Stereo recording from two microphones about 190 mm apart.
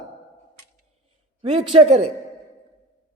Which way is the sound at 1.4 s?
30° right (ahead or behind).